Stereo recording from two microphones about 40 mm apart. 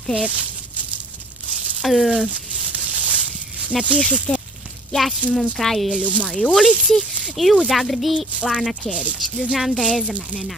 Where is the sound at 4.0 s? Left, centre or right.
Left.